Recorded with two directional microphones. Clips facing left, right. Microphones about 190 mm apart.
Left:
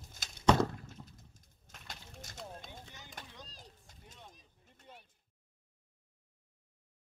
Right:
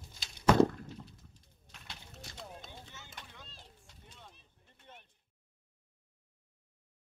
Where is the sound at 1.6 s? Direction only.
45° left (ahead or behind).